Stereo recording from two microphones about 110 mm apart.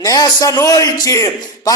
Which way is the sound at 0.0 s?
30° left (ahead or behind).